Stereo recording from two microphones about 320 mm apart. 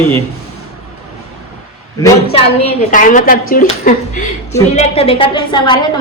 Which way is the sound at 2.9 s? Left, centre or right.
Left.